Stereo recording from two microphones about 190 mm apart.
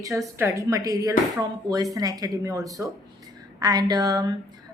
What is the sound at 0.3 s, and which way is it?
A woman's voice, 15° right (ahead or behind).